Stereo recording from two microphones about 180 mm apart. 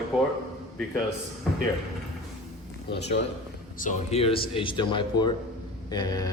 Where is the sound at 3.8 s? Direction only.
40° left (ahead or behind).